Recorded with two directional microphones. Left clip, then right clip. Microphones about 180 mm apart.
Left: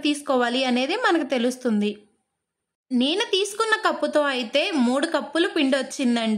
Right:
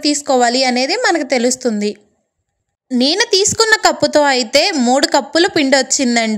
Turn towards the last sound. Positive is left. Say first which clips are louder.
# right 10 dB
turn(degrees=-25)  # may be behind; listen again after turning